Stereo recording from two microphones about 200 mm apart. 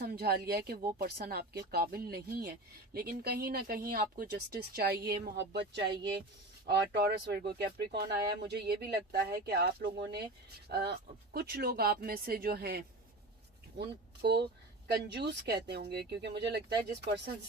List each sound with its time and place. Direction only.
0.0 s speech: 50° right (ahead or behind)